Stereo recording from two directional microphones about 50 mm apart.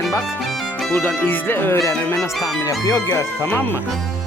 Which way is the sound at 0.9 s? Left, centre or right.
Left.